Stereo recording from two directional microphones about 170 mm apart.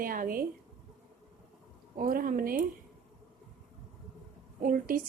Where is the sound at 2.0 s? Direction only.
55° right (ahead or behind).